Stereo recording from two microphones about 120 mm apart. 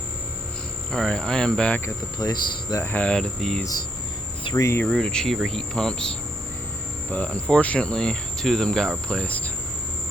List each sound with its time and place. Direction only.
0.9 s speech: 5° left (ahead or behind)
2.1 s speech: 35° left (ahead or behind)
2.8 s speech: 10° left (ahead or behind)
3.6 s speech: 30° left (ahead or behind)
4.9 s speech: 5° left (ahead or behind)